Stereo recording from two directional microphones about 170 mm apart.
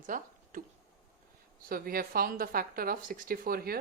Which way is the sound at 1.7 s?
60° right (ahead or behind).